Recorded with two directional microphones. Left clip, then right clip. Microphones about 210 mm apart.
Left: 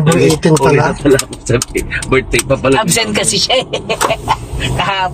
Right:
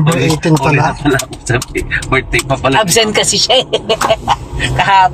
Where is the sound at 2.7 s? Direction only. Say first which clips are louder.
Right 2 dB; 30° right (ahead or behind).